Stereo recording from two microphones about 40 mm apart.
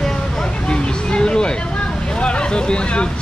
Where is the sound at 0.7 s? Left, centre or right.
Left.